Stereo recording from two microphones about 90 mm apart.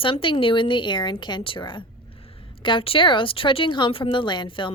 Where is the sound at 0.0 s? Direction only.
70° left (ahead or behind).